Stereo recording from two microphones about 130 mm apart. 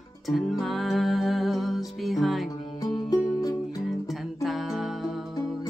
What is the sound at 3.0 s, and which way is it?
Music, 30° left (ahead or behind).